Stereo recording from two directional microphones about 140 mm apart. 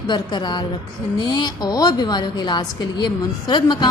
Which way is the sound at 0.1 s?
30° left (ahead or behind).